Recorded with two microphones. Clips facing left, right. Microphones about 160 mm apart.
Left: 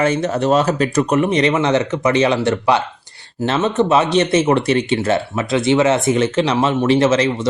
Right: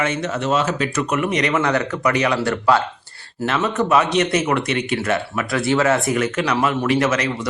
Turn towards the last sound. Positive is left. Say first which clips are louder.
# left 5 dB
turn(degrees=25)  # may be behind; listen again after turning